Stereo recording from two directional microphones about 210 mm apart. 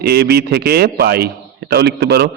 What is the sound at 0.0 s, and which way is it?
A man's voice, 50° right (ahead or behind).